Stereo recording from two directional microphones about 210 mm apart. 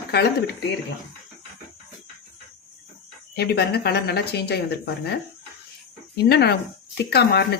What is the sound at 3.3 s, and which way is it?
A woman's voice, 50° left (ahead or behind).